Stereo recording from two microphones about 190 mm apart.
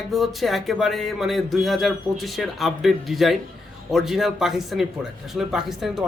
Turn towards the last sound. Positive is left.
turn(degrees=0)  # may be behind; listen again after turning